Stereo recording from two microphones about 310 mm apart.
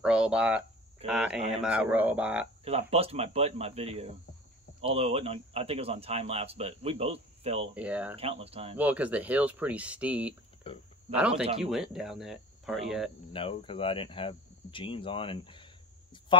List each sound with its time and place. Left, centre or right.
0.0 s speech: centre
2.6 s speech: centre
7.7 s speech: centre
8.2 s speech: centre
8.7 s speech: centre
10.6 s speech: centre
11.1 s speech: centre
13.3 s speech: centre